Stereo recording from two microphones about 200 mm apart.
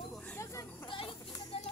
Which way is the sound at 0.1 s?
5° left (ahead or behind).